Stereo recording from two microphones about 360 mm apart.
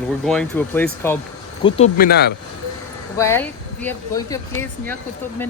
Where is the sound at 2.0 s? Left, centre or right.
Left.